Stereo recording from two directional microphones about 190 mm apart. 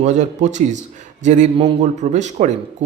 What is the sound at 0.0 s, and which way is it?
Speech, 40° right (ahead or behind).